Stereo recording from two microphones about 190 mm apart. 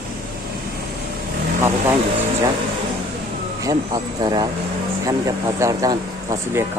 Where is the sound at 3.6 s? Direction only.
20° right (ahead or behind).